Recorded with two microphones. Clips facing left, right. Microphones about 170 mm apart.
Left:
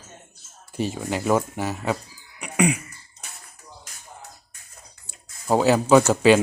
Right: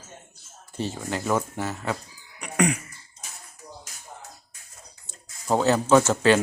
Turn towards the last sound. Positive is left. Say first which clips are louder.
# left 3 dB
turn(degrees=15)  # may be behind; listen again after turning